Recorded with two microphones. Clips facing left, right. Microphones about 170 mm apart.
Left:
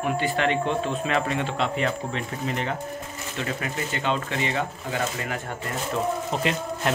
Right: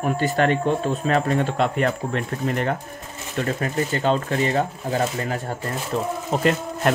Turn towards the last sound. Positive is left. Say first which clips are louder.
# right 2 dB
turn(degrees=-45)  # may be behind; listen again after turning